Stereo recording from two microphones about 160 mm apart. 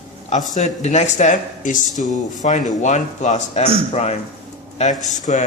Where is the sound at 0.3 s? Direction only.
50° left (ahead or behind).